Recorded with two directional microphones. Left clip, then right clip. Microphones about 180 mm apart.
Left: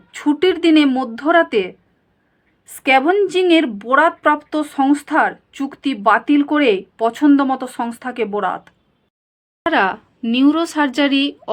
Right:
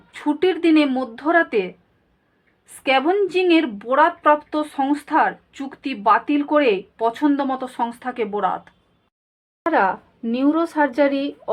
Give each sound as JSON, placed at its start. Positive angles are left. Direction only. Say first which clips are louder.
{"t": 0.1, "sound": "speech", "louder": "left 4 dB", "side_deg": 30}
{"t": 2.8, "sound": "speech", "louder": "left 4 dB", "side_deg": 35}
{"t": 9.6, "sound": "a woman's voice", "louder": "left 2 dB", "side_deg": 45}